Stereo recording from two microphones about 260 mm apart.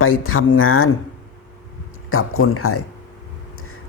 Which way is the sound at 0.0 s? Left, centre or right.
Left.